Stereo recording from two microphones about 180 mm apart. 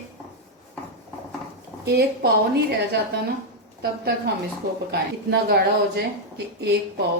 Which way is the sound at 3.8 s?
65° right (ahead or behind).